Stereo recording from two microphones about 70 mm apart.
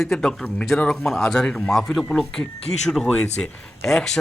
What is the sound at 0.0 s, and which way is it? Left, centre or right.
Speech, centre.